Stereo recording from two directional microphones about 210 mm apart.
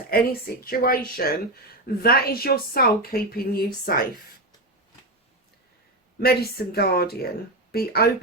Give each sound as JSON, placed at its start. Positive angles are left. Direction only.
{"t": 0.1, "sound": "a woman's voice", "side_deg": 45}
{"t": 6.1, "sound": "a woman's voice", "side_deg": 50}